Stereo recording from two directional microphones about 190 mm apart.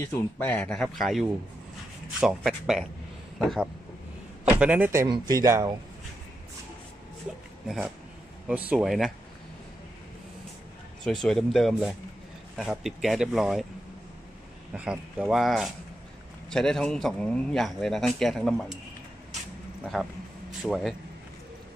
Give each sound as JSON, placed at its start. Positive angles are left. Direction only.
{"t": 0.0, "sound": "speech", "side_deg": 10}
{"t": 7.6, "sound": "speech", "side_deg": 0}
{"t": 11.1, "sound": "speech", "side_deg": 0}
{"t": 14.7, "sound": "speech", "side_deg": -5}
{"t": 19.9, "sound": "speech", "side_deg": 0}